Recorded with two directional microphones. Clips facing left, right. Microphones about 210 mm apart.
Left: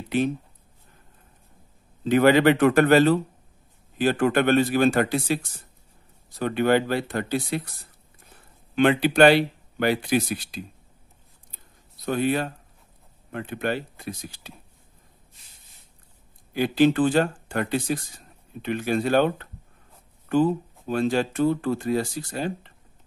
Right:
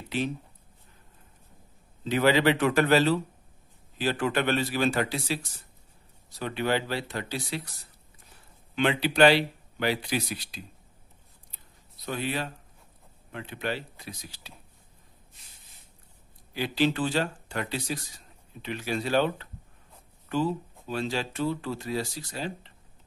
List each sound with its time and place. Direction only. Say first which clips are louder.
2.0 s speech: left 6 dB; 50° left (ahead or behind)
8.7 s speech: left 6 dB; 50° left (ahead or behind)
11.5 s a sound: left 4 dB; 50° left (ahead or behind)
13.3 s speech: left 6 dB; 50° left (ahead or behind)
16.5 s speech: left 7 dB; 50° left (ahead or behind)